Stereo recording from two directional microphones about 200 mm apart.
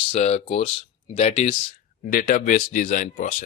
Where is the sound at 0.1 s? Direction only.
30° left (ahead or behind).